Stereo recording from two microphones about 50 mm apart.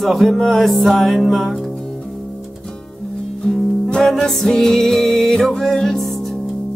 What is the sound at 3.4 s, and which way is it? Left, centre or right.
Music, centre.